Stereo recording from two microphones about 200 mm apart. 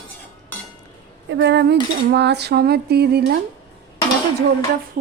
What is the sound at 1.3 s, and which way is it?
A woman's voice, 60° right (ahead or behind).